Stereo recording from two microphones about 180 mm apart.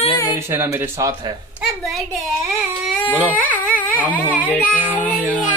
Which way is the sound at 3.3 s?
10° left (ahead or behind).